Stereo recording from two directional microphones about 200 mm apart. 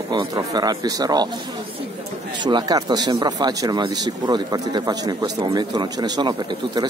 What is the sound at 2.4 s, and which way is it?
Speech, 20° right (ahead or behind).